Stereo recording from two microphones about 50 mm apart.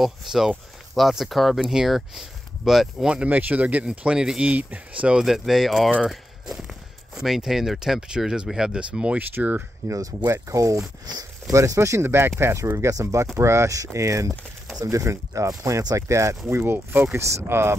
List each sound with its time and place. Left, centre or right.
0.0 s speech: centre
3.3 s speech: right
5.2 s speech: centre
10.2 s speech: right
11.5 s speech: right
12.0 s speech: right
12.7 s speech: right
17.1 s speech: right
17.5 s speech: right